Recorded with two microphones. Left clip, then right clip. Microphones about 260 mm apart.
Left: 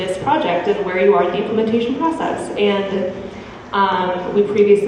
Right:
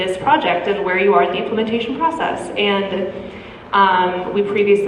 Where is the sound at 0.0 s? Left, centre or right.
Centre.